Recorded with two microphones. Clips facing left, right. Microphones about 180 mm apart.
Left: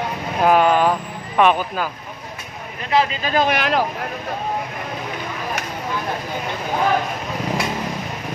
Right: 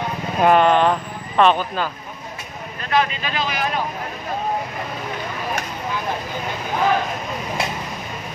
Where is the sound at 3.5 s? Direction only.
85° left.